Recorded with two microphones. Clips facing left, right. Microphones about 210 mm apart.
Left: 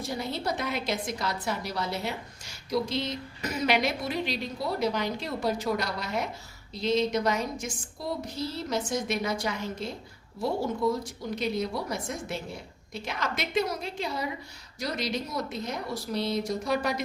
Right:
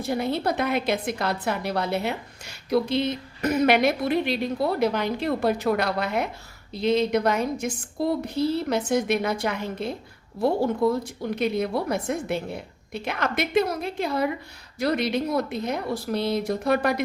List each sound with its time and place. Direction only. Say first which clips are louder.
0.0 s a woman's voice: right 7 dB; 60° right (ahead or behind)